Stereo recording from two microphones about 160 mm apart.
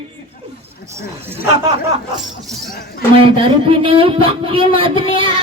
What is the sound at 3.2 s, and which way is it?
Speech, 35° right (ahead or behind).